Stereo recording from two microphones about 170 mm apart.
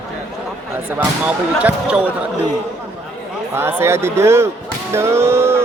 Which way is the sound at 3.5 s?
15° right (ahead or behind).